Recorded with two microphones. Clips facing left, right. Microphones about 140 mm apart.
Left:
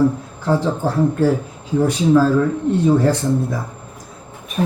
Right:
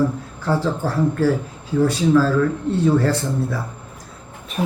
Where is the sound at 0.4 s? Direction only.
15° left (ahead or behind).